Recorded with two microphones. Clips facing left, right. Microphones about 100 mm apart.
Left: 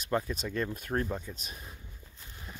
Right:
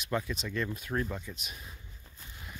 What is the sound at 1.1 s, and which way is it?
Speech, 35° left (ahead or behind).